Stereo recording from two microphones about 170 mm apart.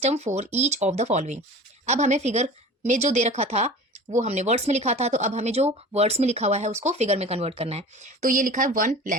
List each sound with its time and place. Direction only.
0.0 s speech: 40° right (ahead or behind)